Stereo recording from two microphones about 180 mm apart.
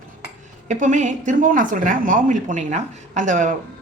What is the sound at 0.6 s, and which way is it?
A woman's voice, 45° right (ahead or behind).